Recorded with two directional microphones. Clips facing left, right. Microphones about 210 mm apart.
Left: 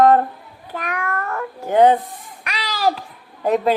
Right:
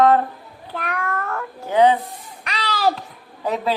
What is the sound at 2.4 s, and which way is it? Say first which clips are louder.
Babbling: right 1 dB; 10° left (ahead or behind).